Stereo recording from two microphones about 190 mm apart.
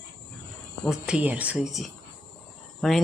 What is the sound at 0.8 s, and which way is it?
Speech, 5° right (ahead or behind).